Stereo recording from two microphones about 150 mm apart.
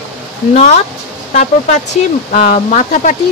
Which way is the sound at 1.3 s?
55° left (ahead or behind).